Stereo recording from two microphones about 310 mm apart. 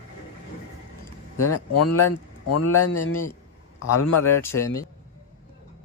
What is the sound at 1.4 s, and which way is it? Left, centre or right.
Speech, left.